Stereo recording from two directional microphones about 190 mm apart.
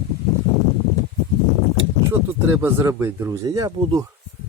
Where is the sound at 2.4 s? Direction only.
15° right (ahead or behind).